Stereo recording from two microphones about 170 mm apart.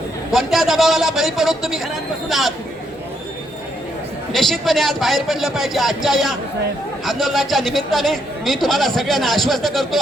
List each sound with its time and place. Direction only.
0.3 s a man's voice: centre (ahead or behind)
4.3 s a man's voice: centre (ahead or behind)